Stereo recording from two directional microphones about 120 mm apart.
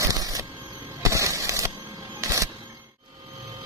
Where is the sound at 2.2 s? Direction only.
25° right (ahead or behind).